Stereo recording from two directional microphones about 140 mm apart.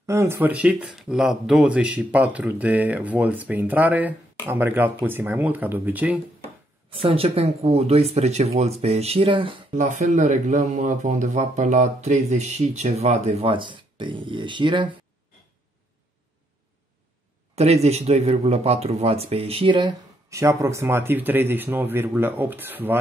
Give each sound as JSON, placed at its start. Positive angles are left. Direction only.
{"t": 0.0, "sound": "speech", "side_deg": -20}
{"t": 6.9, "sound": "speech", "side_deg": -40}
{"t": 9.8, "sound": "speech", "side_deg": -65}
{"t": 17.6, "sound": "speech", "side_deg": -50}
{"t": 20.2, "sound": "speech", "side_deg": -20}